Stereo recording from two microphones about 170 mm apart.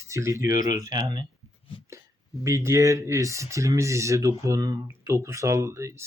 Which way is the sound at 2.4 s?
15° right (ahead or behind).